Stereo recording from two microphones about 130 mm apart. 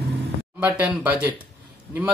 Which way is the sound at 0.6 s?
15° right (ahead or behind).